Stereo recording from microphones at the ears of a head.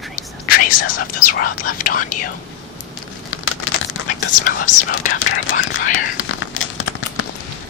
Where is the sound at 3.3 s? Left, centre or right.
Left.